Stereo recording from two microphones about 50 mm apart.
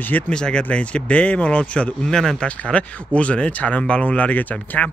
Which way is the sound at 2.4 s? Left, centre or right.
Left.